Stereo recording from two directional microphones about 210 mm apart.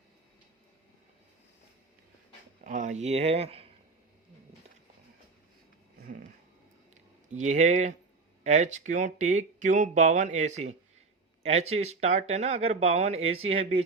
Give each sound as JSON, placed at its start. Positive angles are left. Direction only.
{"t": 2.6, "sound": "speech", "side_deg": -35}
{"t": 6.0, "sound": "cat", "side_deg": -40}
{"t": 6.9, "sound": "speech", "side_deg": -35}